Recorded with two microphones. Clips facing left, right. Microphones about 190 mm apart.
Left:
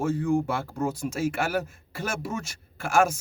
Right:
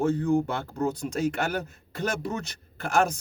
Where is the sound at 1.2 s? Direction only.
5° left (ahead or behind).